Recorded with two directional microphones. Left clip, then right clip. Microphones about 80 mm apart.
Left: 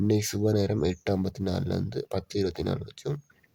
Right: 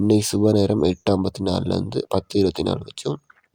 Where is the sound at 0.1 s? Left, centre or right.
Right.